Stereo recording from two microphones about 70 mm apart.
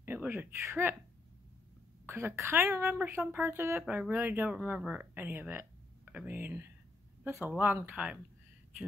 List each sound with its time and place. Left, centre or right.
0.0 s speech: right
2.0 s a woman's voice: right; by 5.0 s centre
5.1 s a woman's voice: right
7.5 s speech: right